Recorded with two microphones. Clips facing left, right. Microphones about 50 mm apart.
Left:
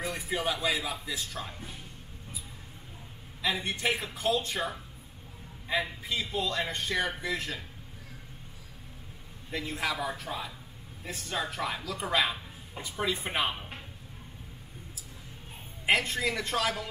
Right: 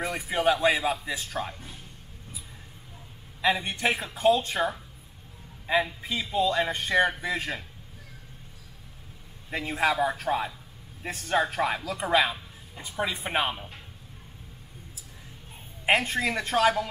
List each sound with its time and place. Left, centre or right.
0.0 s speech: right
1.0 s speech: right
3.8 s speech: right
5.7 s a man's voice: right
9.5 s speech: right
13.2 s speech: centre
15.8 s speech: right